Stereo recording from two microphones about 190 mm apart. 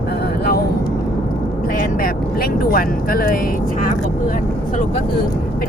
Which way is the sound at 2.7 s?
50° left (ahead or behind).